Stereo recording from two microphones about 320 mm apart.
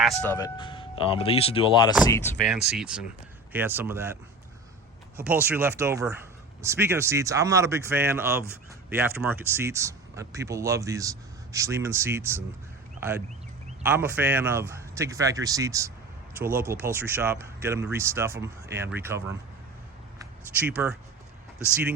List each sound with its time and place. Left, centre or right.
0.0 s speech: centre
5.1 s speech: centre
13.0 s a sound: centre
13.8 s speech: centre
20.6 s speech: centre